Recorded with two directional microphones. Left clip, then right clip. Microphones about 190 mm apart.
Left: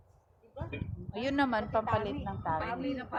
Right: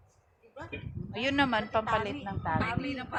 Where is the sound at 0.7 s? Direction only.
20° right (ahead or behind).